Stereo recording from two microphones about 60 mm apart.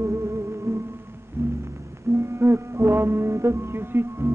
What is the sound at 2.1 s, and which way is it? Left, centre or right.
Music, right.